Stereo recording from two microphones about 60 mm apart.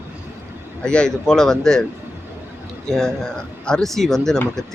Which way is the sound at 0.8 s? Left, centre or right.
Centre.